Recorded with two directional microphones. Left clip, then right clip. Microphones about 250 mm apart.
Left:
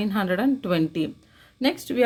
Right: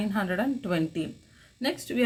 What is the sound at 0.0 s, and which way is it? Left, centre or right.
Speech, left.